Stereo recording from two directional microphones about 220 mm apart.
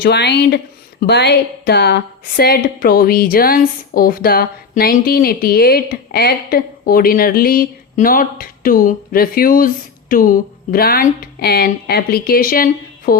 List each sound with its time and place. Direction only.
0.0 s speech: 50° left (ahead or behind)